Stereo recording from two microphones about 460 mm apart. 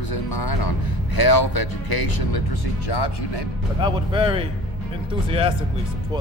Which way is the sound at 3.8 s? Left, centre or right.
Centre.